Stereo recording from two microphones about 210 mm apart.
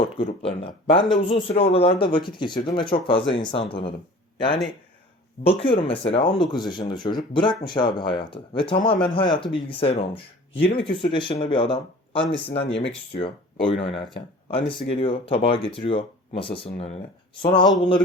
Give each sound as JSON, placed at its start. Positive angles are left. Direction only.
{"t": 0.2, "sound": "speech", "side_deg": 25}